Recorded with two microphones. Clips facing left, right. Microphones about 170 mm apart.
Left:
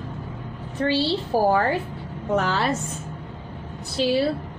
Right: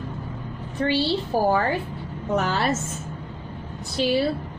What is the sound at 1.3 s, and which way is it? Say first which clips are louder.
A woman's voice: left 2 dB; 5° left (ahead or behind).